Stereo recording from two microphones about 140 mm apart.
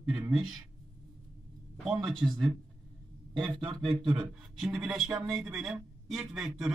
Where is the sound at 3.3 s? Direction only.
Centre (ahead or behind).